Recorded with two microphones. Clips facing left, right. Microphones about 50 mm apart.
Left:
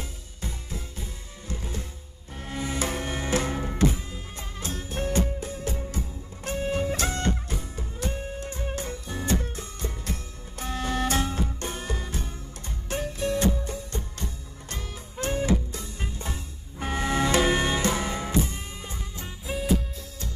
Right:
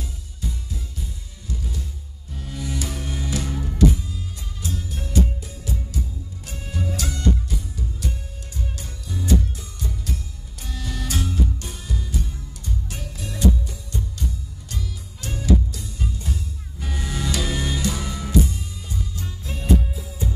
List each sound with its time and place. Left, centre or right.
0.4 s music: left
19.4 s music: centre